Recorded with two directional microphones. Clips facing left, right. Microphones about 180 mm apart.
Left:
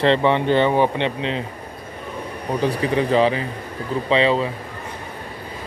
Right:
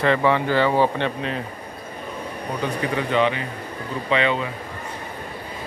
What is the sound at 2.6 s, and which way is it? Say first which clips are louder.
A man's voice: left 5 dB; 30° left (ahead or behind).